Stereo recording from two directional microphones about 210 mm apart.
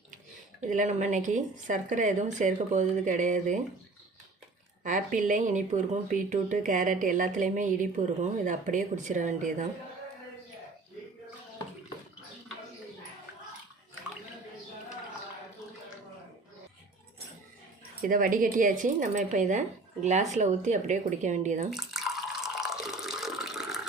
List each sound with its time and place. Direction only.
0.7 s a woman's voice: 35° right (ahead or behind)
4.8 s a woman's voice: 40° right (ahead or behind)
18.0 s a woman's voice: 40° right (ahead or behind)
21.7 s water: centre (ahead or behind)